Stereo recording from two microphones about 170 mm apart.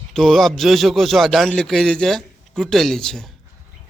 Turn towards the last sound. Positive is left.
turn(degrees=5)  # may be behind; listen again after turning